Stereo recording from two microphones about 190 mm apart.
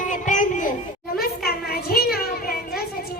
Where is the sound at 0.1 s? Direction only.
40° left (ahead or behind).